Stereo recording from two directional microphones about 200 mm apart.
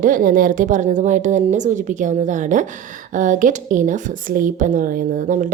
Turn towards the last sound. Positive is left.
turn(degrees=-40)  # may be behind; listen again after turning